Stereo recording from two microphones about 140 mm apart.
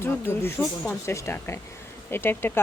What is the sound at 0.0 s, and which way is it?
Speech, 15° left (ahead or behind).